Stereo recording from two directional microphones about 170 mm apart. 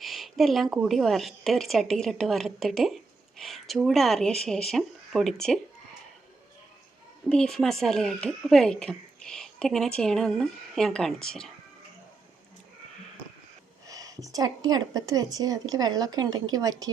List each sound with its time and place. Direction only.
0.0 s a woman's voice: centre (ahead or behind)
7.3 s a woman's voice: 5° left (ahead or behind)
13.8 s a sound: 20° right (ahead or behind)
14.3 s speech: 20° right (ahead or behind)